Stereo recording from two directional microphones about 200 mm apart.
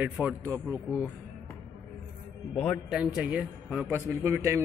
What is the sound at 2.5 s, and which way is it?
A man's voice, centre (ahead or behind).